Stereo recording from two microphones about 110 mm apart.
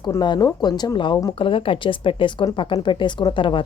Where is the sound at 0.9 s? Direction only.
45° left (ahead or behind).